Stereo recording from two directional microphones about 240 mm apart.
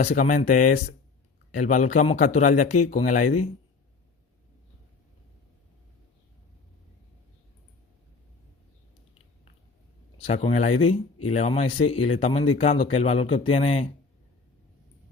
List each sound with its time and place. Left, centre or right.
0.0 s a man's voice: left
10.3 s speech: left